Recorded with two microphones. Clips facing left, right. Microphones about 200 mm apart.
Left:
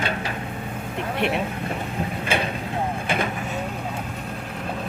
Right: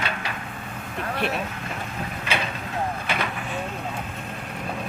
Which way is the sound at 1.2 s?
20° left (ahead or behind).